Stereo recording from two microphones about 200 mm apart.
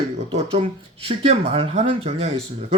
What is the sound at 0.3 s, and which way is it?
Speech, 30° right (ahead or behind).